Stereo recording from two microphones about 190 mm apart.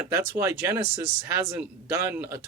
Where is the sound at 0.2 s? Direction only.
10° right (ahead or behind).